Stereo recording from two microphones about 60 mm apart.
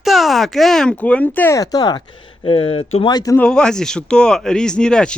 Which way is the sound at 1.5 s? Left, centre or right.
Left.